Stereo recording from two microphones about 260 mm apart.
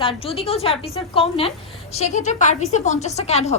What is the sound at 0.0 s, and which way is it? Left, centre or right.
A woman's voice, left.